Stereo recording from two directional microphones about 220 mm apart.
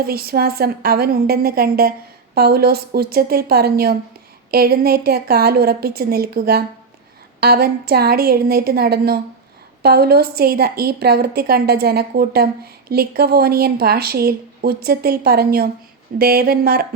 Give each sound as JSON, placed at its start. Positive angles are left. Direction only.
{"t": 0.0, "sound": "speech", "side_deg": -45}